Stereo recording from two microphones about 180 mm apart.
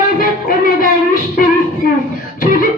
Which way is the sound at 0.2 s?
50° left (ahead or behind).